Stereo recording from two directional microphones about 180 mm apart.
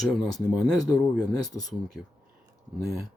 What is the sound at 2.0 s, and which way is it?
Speech, centre (ahead or behind).